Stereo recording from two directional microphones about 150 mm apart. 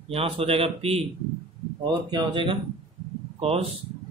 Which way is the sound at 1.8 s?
30° right (ahead or behind).